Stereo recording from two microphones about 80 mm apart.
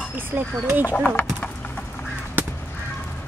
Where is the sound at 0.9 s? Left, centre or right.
Centre.